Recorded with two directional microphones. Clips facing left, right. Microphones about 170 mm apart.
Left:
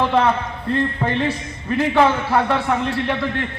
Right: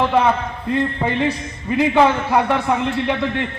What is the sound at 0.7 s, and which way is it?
A man's voice, 15° right (ahead or behind).